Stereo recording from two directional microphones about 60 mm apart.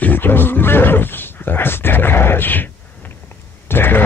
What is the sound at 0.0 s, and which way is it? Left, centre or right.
Speech, left.